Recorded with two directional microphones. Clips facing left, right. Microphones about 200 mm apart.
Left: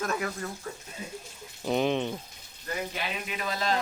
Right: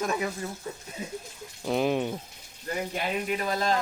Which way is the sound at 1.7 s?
5° right (ahead or behind).